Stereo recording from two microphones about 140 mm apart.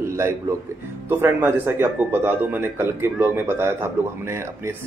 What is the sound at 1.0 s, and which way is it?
A man's voice, 15° right (ahead or behind).